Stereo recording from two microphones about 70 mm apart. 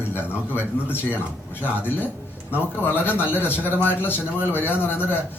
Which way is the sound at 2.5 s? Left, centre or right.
Left.